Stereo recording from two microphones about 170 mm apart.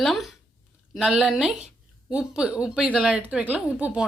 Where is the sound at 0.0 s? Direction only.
Centre (ahead or behind).